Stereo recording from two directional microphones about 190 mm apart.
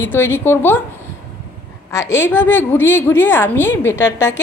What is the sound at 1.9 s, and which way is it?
A woman's voice, 15° left (ahead or behind).